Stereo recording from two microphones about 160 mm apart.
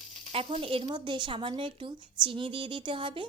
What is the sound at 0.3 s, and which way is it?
A woman's voice, 35° right (ahead or behind).